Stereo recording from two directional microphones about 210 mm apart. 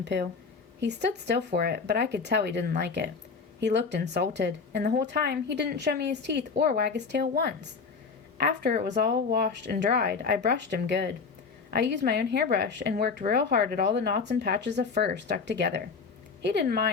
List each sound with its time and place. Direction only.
0.0 s a woman's voice: 55° right (ahead or behind)
8.9 s speech: 45° right (ahead or behind)